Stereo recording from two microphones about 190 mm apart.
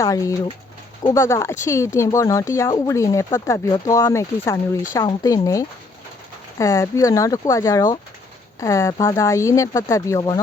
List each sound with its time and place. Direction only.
0.0 s speech: 15° left (ahead or behind)